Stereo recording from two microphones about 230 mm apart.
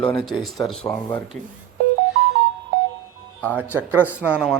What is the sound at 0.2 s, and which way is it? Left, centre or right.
Speech, centre.